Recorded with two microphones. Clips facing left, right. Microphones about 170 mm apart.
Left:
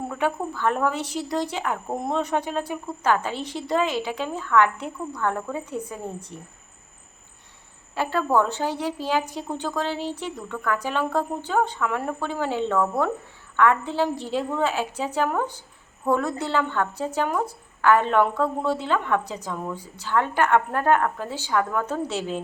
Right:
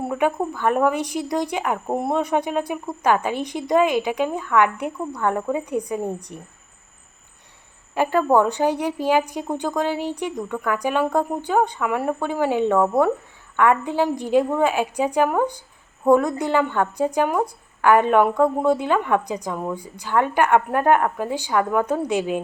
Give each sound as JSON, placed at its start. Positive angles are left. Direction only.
{"t": 0.0, "sound": "a woman's voice", "side_deg": -15}
{"t": 6.3, "sound": "speech", "side_deg": -60}
{"t": 7.9, "sound": "a woman's voice", "side_deg": -15}